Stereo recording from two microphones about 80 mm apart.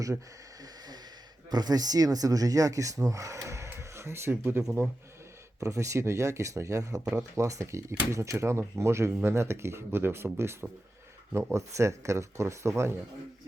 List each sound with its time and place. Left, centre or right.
1.5 s speech: right
5.6 s speech: right
7.0 s speech: centre
7.3 s speech: right